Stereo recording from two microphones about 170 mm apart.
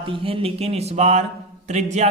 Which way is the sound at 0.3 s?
35° right (ahead or behind).